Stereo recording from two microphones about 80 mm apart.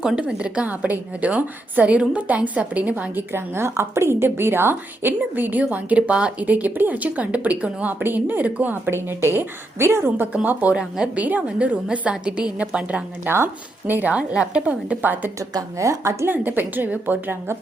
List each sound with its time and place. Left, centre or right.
0.0 s a woman's voice: centre
3.3 s a woman's voice: right
8.9 s a woman's voice: right; by 13.1 s centre
13.2 s a woman's voice: right
15.4 s a woman's voice: right
16.3 s a woman's voice: right